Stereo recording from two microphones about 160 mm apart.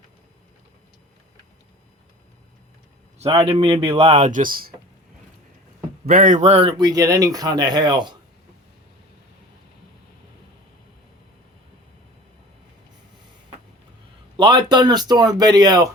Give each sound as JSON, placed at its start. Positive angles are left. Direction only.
{"t": 3.2, "sound": "speech", "side_deg": -35}
{"t": 6.1, "sound": "speech", "side_deg": -60}
{"t": 14.3, "sound": "speech", "side_deg": -30}